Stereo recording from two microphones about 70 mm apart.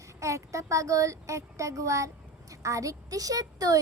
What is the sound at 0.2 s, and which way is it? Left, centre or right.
A woman's voice, right.